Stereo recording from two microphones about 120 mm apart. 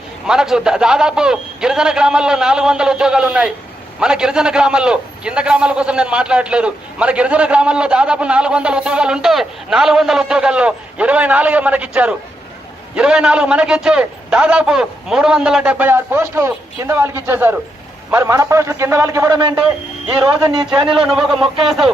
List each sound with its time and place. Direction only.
0.3 s a man's voice: 5° right (ahead or behind); by 20.7 s 45° right (ahead or behind)
21.0 s speech: 5° right (ahead or behind)